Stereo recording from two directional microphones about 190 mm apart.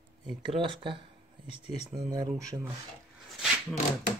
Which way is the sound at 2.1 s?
20° right (ahead or behind).